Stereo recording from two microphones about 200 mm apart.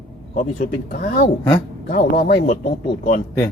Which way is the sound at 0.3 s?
40° left (ahead or behind).